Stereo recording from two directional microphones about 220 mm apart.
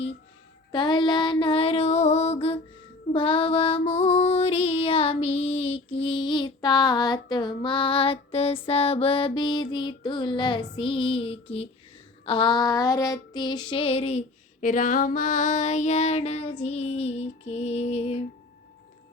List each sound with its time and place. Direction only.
0.7 s female singing: 20° left (ahead or behind)